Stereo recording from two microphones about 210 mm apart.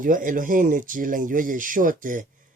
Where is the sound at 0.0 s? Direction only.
40° right (ahead or behind).